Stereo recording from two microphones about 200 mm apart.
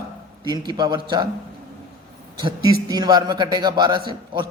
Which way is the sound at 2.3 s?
20° right (ahead or behind).